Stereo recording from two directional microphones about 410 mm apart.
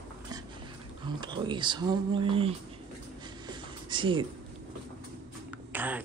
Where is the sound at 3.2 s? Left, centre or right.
Centre.